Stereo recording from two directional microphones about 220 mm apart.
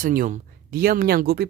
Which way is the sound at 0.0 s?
40° right (ahead or behind).